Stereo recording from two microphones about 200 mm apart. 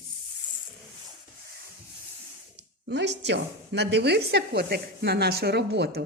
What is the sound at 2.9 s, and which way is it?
Speech, 60° right (ahead or behind).